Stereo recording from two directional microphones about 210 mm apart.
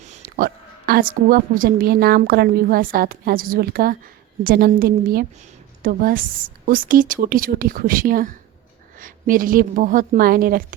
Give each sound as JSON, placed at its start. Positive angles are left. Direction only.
{"t": 0.0, "sound": "a woman's voice", "side_deg": -40}